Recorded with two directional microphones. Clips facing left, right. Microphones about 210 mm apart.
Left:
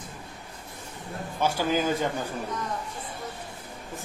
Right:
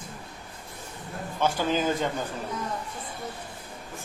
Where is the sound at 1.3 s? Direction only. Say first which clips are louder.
Even; 10° left (ahead or behind).